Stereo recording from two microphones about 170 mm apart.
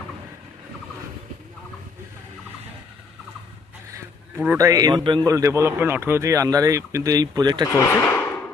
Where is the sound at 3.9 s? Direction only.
15° right (ahead or behind).